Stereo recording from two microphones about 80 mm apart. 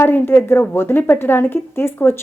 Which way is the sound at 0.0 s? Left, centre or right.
Left.